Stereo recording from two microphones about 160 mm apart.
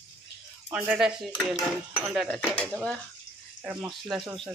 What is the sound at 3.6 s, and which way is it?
Speech, 10° right (ahead or behind).